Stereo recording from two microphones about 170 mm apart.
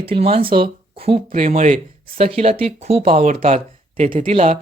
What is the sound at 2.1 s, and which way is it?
Speech, 35° right (ahead or behind).